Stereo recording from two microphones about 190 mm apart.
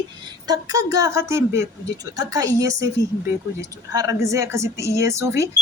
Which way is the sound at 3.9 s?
20° right (ahead or behind).